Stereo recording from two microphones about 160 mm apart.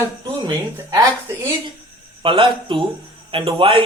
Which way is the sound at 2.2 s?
30° right (ahead or behind).